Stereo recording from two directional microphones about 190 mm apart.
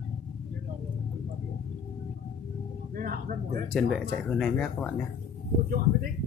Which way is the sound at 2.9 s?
50° right (ahead or behind).